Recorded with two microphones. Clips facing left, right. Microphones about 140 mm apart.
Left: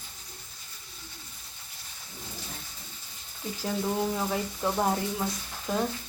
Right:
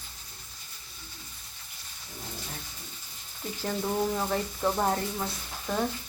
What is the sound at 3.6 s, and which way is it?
Speech, 5° left (ahead or behind).